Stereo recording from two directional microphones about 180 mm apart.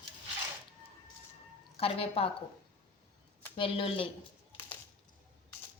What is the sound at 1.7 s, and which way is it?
Speech, 30° left (ahead or behind).